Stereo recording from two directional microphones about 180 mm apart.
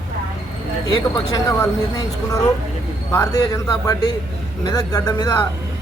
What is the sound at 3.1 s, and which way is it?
Speech, 15° left (ahead or behind).